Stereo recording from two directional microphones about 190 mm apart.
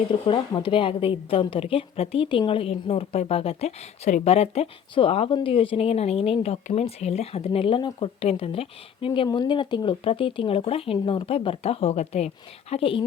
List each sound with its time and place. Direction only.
0.3 s a woman's voice: 25° left (ahead or behind)